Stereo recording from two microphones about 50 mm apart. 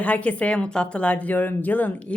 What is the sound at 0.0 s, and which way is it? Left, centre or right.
A woman's voice, left.